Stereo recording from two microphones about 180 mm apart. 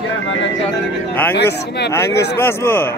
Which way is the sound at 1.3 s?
65° left (ahead or behind).